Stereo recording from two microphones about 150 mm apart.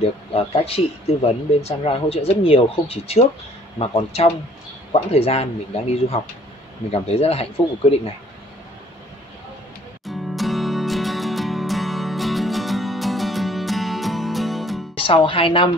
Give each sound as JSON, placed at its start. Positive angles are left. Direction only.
{"t": 0.3, "sound": "speech", "side_deg": 40}
{"t": 10.0, "sound": "music", "side_deg": 0}
{"t": 15.0, "sound": "speech", "side_deg": 35}